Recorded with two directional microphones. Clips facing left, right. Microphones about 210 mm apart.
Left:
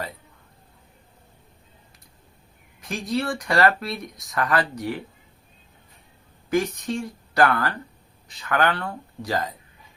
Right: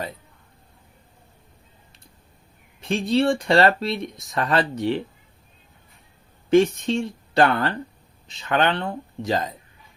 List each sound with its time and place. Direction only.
2.8 s speech: 25° right (ahead or behind)
6.5 s speech: 25° right (ahead or behind)